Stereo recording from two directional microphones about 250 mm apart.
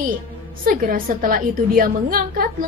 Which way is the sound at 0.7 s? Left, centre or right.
Right.